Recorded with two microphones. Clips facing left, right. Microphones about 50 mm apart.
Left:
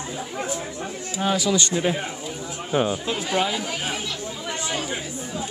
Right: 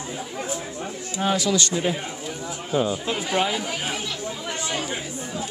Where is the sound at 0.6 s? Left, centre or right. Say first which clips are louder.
Left 1 dB; centre.